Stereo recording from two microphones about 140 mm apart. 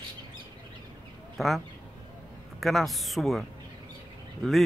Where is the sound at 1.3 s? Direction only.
Centre (ahead or behind).